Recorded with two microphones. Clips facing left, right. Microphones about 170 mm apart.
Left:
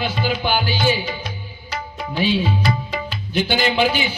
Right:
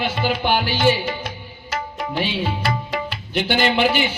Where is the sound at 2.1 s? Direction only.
65° right (ahead or behind).